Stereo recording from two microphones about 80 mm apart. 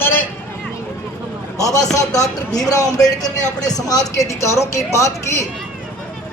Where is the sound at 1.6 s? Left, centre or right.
Left.